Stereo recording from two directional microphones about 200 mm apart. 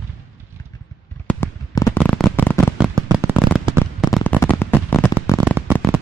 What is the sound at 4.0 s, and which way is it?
Fireworks, 5° left (ahead or behind).